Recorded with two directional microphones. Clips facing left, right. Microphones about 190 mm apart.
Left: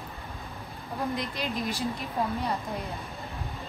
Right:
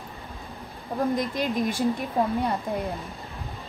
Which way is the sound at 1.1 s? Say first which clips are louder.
Right 6 dB; 50° right (ahead or behind).